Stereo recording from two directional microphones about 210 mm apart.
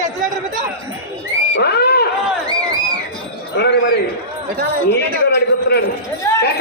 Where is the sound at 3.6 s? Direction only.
50° left (ahead or behind).